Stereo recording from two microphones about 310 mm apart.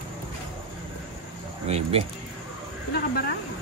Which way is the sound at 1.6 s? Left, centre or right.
Centre.